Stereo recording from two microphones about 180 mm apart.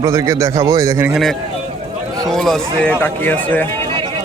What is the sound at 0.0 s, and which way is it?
Speech, 20° right (ahead or behind).